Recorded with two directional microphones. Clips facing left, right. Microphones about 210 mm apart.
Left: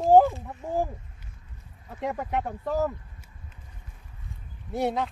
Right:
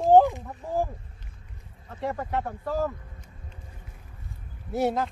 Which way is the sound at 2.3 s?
15° left (ahead or behind).